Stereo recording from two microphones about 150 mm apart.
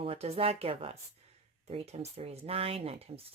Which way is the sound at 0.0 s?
40° right (ahead or behind).